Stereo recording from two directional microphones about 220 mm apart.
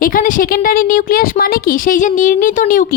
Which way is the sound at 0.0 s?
40° left (ahead or behind).